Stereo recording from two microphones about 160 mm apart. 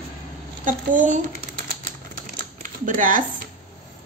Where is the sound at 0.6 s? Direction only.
55° right (ahead or behind).